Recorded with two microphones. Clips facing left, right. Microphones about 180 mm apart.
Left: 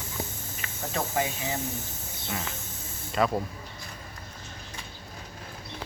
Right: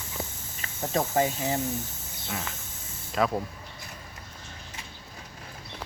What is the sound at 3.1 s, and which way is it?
Speech, centre (ahead or behind).